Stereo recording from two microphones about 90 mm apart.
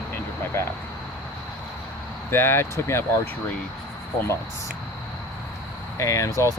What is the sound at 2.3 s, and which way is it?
Speech, 30° left (ahead or behind).